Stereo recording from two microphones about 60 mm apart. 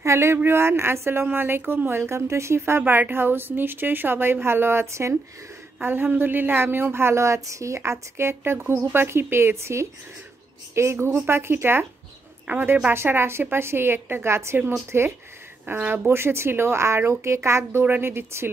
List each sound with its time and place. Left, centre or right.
0.0 s a woman's voice: right
5.8 s a woman's voice: right
15.6 s a woman's voice: right
16.1 s speech: right
17.8 s a woman's voice: right